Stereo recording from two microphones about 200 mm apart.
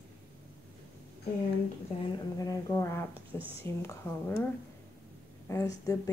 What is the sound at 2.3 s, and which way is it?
A woman's voice, 15° left (ahead or behind).